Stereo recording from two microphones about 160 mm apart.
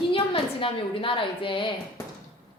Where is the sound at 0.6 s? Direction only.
35° left (ahead or behind).